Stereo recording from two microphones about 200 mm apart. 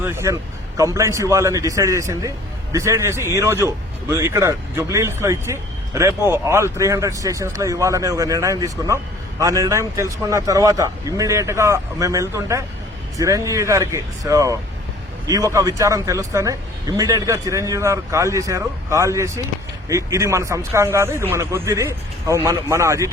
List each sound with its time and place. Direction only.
0.0 s a man's voice: 15° right (ahead or behind)